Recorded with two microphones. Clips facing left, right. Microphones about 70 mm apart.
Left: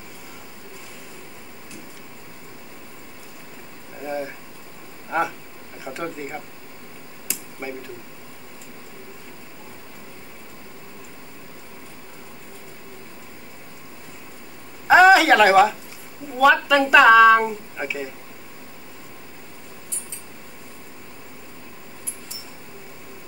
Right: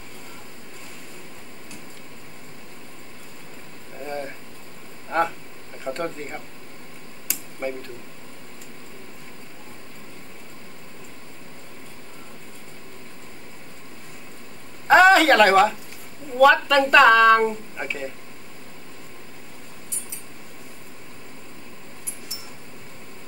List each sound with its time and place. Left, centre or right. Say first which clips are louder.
4.0 s a sound: left 3 dB; centre
5.1 s speech: right 1 dB; centre
7.6 s speech: right 4 dB; centre
14.9 s a woman's voice: left 1 dB; centre